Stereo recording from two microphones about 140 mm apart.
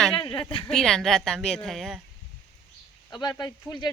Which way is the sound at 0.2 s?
35° left (ahead or behind).